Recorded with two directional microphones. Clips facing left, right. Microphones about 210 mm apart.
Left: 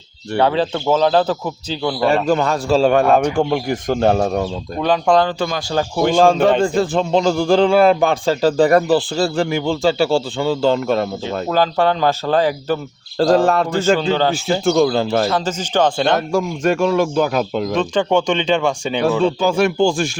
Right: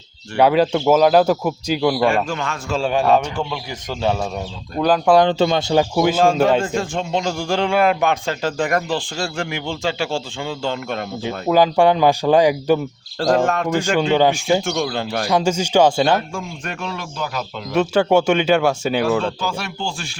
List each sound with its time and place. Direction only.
0.3 s speech: 10° right (ahead or behind)
2.0 s a man's voice: 35° left (ahead or behind)
2.9 s speech: 55° left (ahead or behind)
4.8 s speech: 5° right (ahead or behind)
5.2 s speech: 25° right (ahead or behind)
6.7 s a man's voice: 35° left (ahead or behind)
11.4 s speech: 15° right (ahead or behind)
13.1 s a man's voice: 35° left (ahead or behind)
14.1 s speech: 15° right (ahead or behind)
14.6 s a man's voice: 35° left (ahead or behind)
15.3 s speech: 10° right (ahead or behind)
16.3 s speech: 45° left (ahead or behind)
17.7 s speech: 10° right (ahead or behind)
19.4 s speech: 55° left (ahead or behind)